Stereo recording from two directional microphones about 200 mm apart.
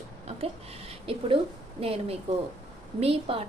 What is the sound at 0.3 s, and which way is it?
A woman's voice, 30° right (ahead or behind).